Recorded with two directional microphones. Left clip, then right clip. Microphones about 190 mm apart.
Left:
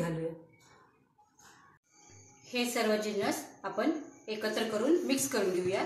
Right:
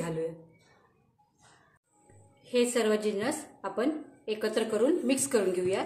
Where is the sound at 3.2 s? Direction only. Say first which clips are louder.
Right 1 dB; 45° right (ahead or behind).